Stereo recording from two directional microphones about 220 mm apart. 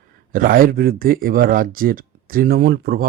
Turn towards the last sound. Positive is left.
turn(degrees=-45)  # may be behind; listen again after turning